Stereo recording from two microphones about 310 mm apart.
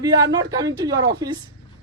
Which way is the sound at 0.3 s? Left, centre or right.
Centre.